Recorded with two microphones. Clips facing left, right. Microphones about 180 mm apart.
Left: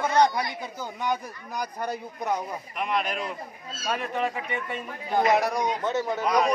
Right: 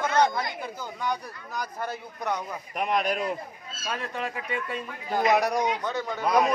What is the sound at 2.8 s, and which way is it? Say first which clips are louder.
Speech: right 2 dB; 45° right (ahead or behind).